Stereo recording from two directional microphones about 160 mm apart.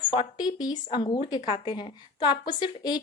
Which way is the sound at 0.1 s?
30° left (ahead or behind).